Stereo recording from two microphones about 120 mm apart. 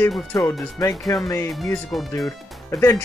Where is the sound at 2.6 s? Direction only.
20° left (ahead or behind).